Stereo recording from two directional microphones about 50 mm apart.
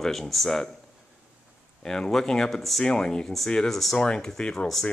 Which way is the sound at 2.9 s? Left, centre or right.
Centre.